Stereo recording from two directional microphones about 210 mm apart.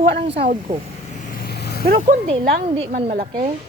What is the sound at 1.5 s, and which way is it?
Vehicle, 50° left (ahead or behind).